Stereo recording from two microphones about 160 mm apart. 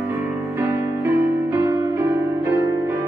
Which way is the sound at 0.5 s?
15° right (ahead or behind).